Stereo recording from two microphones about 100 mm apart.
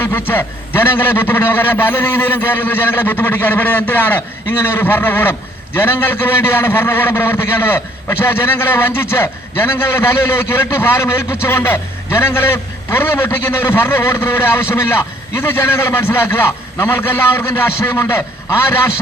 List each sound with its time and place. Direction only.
0.0 s a man's voice: 20° left (ahead or behind)